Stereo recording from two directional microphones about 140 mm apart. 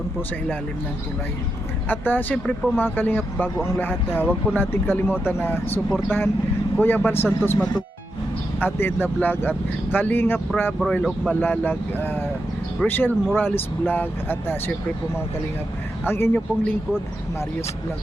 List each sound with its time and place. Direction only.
1.9 s speech: 15° left (ahead or behind)
10.8 s speech: centre (ahead or behind)
16.0 s speech: 15° left (ahead or behind)